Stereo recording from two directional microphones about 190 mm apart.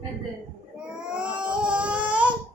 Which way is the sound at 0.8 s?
5° right (ahead or behind).